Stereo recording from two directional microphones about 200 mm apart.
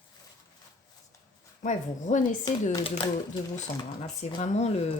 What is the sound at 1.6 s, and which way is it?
Speech, 40° left (ahead or behind).